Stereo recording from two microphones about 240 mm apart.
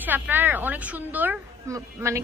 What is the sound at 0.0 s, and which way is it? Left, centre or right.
A woman's voice, centre.